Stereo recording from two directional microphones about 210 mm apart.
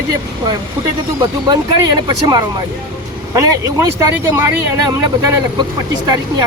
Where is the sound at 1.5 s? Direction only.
20° right (ahead or behind).